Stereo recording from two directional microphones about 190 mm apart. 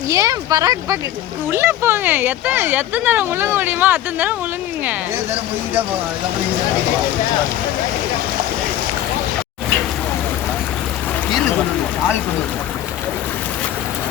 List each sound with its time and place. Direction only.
0.1 s speech: 20° right (ahead or behind)